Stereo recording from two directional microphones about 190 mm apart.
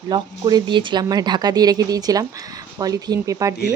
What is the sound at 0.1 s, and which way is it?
Speech, 20° right (ahead or behind).